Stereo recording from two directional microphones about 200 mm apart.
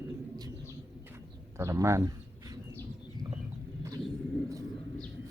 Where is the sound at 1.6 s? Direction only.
15° right (ahead or behind).